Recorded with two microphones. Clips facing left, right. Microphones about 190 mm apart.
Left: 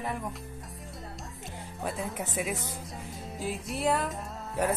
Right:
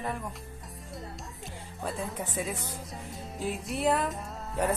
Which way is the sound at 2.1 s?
15° left (ahead or behind).